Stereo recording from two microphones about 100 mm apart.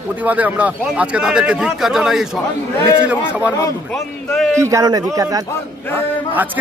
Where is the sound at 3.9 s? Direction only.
Centre (ahead or behind).